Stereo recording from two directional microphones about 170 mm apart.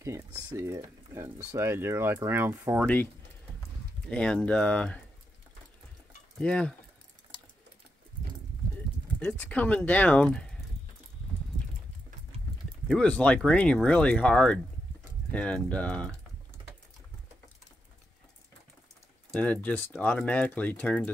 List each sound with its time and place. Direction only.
0.0 s speech: 20° right (ahead or behind)
4.1 s speech: 5° left (ahead or behind)
6.4 s speech: 5° left (ahead or behind)
9.2 s speech: 10° left (ahead or behind)
12.8 s speech: 5° left (ahead or behind)
19.3 s speech: 10° left (ahead or behind)